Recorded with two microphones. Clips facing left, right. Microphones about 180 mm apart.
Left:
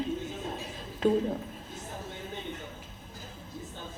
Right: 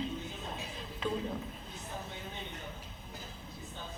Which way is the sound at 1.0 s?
45° left (ahead or behind).